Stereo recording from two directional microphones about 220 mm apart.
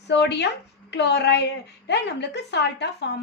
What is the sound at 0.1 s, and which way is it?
A woman's voice, 50° left (ahead or behind).